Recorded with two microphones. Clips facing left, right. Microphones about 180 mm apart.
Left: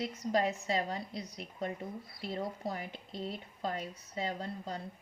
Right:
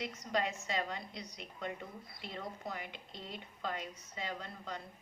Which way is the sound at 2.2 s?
35° left (ahead or behind).